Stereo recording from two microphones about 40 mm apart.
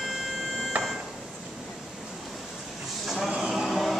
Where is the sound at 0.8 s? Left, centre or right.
Right.